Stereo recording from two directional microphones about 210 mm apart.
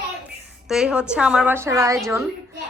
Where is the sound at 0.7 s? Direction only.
5° right (ahead or behind).